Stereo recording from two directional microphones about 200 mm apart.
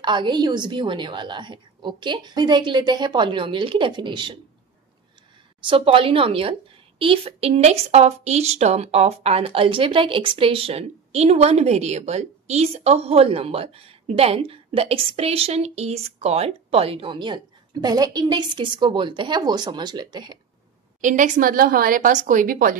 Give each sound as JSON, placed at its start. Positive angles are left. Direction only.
{"t": 0.0, "sound": "a woman's voice", "side_deg": -20}
{"t": 5.6, "sound": "a woman's voice", "side_deg": -25}
{"t": 21.0, "sound": "a woman's voice", "side_deg": -40}